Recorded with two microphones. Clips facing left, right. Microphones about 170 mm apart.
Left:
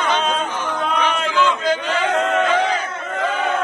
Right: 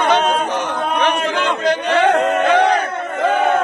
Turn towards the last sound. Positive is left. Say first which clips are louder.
# right 5 dB
turn(degrees=-60)  # may be behind; listen again after turning